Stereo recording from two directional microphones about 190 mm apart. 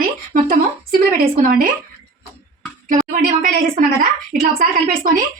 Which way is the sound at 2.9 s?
45° right (ahead or behind).